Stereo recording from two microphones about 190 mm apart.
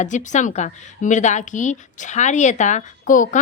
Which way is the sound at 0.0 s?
40° left (ahead or behind).